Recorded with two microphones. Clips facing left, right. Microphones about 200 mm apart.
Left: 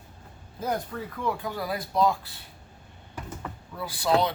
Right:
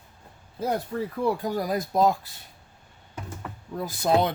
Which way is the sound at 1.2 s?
40° right (ahead or behind).